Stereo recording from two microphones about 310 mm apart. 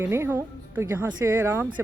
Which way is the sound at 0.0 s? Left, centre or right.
Centre.